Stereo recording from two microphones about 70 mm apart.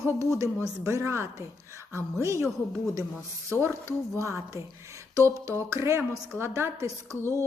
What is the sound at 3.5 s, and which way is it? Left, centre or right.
A woman's voice, right.